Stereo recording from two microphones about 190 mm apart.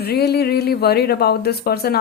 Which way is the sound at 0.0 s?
55° left (ahead or behind).